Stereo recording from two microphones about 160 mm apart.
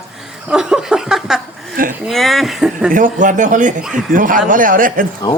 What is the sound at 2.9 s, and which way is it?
Speech, 55° right (ahead or behind).